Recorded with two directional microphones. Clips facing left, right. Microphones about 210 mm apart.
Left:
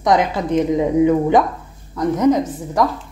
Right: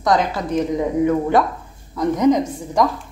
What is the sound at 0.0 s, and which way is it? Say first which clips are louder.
A woman's voice: left 2 dB; 20° left (ahead or behind).